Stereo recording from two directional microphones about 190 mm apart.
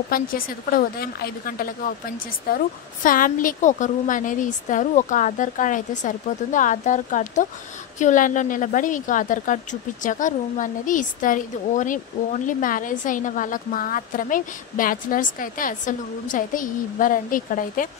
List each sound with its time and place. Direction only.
0.1 s a woman's voice: 50° left (ahead or behind)